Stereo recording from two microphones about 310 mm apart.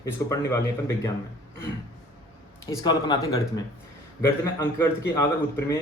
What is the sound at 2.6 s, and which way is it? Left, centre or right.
A man's voice, centre.